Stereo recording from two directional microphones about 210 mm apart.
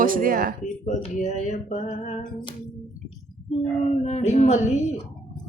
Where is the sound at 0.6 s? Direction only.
35° left (ahead or behind).